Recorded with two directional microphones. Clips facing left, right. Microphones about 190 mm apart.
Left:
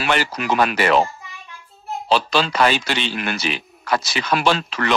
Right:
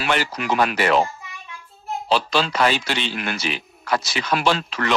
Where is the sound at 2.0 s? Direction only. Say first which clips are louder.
Left 2 dB; 80° left.